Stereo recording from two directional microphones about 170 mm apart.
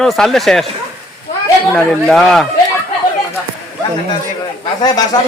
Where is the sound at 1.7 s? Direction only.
Centre (ahead or behind).